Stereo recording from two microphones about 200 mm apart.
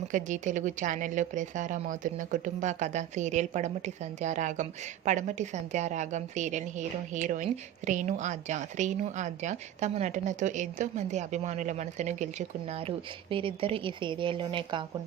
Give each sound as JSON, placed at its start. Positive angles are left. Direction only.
{"t": 0.1, "sound": "speech", "side_deg": -40}